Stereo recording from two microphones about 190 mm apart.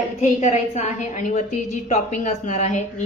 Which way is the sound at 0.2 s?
35° left (ahead or behind).